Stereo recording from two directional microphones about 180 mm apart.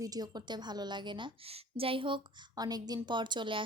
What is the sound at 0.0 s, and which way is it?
A woman's voice, 20° right (ahead or behind).